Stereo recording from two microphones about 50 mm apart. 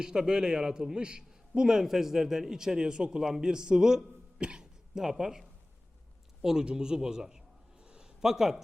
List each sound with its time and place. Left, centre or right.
0.0 s a man's voice: centre
4.4 s cough: right
4.9 s a man's voice: centre